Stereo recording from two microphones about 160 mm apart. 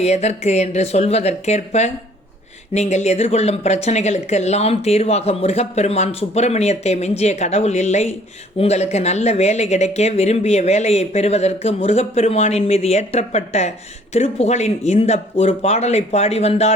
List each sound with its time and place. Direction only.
0.0 s speech: 45° left (ahead or behind)